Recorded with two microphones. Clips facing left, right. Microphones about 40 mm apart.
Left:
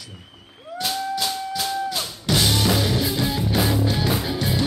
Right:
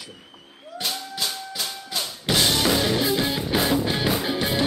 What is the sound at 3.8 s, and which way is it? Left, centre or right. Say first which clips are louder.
Music: left 1 dB; right.